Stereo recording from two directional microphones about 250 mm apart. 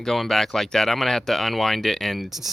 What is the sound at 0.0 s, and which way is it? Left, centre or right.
Speech, centre.